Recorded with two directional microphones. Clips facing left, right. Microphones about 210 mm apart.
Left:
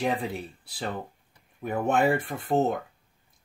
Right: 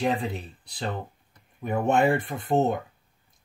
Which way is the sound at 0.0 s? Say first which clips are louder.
Right 1 dB; 10° left (ahead or behind).